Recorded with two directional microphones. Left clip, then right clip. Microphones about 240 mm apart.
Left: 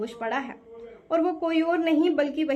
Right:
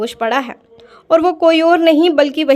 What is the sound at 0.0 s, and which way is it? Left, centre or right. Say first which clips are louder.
A woman's voice: right 12 dB; right.